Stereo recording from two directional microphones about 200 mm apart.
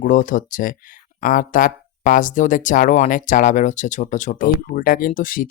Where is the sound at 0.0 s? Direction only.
40° left (ahead or behind).